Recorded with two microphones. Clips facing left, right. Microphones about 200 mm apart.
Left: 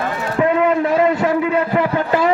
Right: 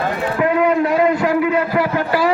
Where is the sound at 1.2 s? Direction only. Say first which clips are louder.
Even; 25° left (ahead or behind).